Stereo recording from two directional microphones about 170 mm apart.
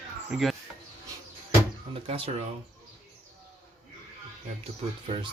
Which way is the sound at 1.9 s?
35° right (ahead or behind).